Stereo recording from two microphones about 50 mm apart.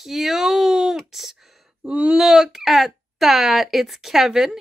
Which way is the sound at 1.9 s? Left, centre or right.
Right.